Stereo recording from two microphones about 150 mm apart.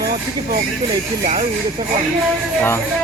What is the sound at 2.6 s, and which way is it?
Speech, 15° left (ahead or behind).